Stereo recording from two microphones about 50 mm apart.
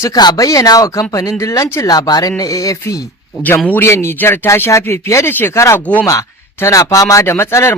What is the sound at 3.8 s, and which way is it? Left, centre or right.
Speech, left.